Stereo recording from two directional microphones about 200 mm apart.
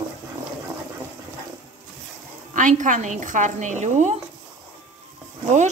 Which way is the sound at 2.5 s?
40° right (ahead or behind).